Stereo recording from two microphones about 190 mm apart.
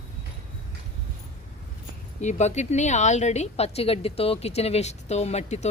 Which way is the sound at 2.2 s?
35° left (ahead or behind).